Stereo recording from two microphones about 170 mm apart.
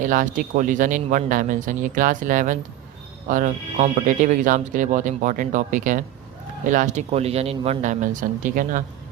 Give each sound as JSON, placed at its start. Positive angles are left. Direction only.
{"t": 0.0, "sound": "speech", "side_deg": -50}